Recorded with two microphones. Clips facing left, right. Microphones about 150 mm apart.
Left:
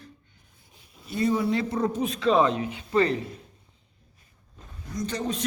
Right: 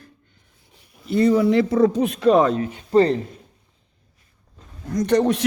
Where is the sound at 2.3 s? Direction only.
45° right (ahead or behind).